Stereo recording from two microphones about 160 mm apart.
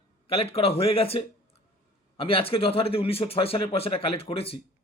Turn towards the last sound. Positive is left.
turn(degrees=35)  # may be behind; listen again after turning